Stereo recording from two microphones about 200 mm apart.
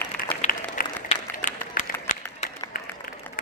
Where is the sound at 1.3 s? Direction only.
40° left (ahead or behind).